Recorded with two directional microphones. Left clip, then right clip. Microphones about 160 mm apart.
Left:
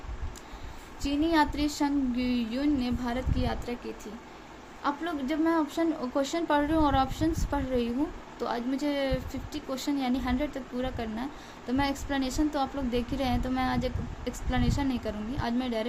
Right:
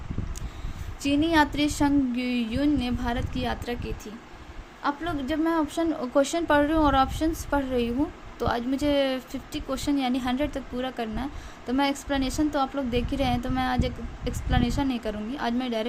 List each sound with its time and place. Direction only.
1.0 s speech: 35° right (ahead or behind)
4.8 s a woman's voice: 25° right (ahead or behind)